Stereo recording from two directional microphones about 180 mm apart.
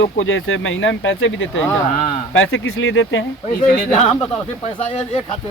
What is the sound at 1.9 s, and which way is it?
Speech, 45° left (ahead or behind).